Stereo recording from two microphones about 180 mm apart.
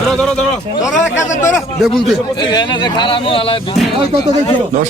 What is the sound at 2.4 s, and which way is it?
Speech, 25° left (ahead or behind).